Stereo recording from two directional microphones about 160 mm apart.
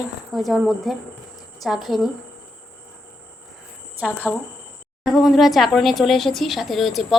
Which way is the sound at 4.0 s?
5° right (ahead or behind).